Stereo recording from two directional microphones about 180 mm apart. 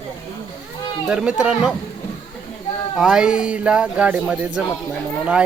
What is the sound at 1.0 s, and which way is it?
Speech, 5° right (ahead or behind).